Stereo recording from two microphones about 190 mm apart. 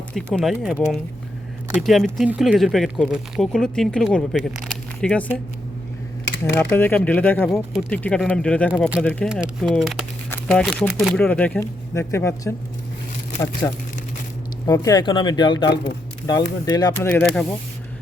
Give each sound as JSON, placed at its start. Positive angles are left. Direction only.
{"t": 0.1, "sound": "speech", "side_deg": 5}
{"t": 1.8, "sound": "speech", "side_deg": 0}
{"t": 6.4, "sound": "speech", "side_deg": 10}